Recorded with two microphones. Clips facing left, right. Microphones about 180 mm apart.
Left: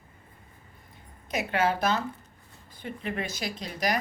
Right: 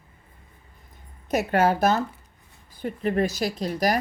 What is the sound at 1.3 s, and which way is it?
Speech, 40° right (ahead or behind).